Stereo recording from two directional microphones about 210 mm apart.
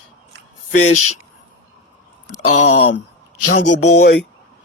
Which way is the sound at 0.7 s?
35° left (ahead or behind).